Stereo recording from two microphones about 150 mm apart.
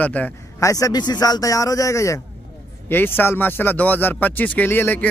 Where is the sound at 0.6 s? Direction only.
20° left (ahead or behind).